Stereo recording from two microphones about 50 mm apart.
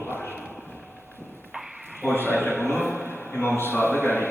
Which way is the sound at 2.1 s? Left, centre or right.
Right.